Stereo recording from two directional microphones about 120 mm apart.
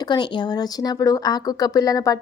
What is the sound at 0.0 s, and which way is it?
A woman's voice, 40° left (ahead or behind).